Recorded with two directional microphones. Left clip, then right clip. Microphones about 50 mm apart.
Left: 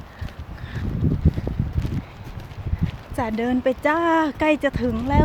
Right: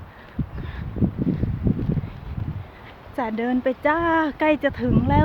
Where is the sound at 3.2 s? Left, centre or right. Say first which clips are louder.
Left 1 dB; right.